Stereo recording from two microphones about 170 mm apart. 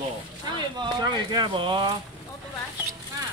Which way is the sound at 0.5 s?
25° right (ahead or behind).